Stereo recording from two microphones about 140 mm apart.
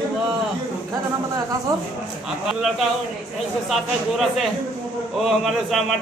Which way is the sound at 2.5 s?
Centre (ahead or behind).